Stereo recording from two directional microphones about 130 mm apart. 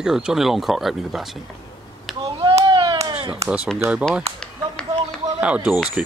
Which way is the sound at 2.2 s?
45° right (ahead or behind).